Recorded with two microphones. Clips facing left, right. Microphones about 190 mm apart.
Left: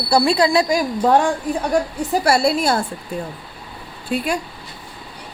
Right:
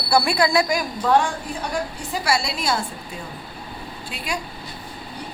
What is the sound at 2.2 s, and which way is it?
Speech, 55° left (ahead or behind).